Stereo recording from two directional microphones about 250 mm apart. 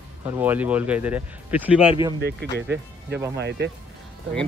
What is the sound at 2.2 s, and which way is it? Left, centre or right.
Speech, right.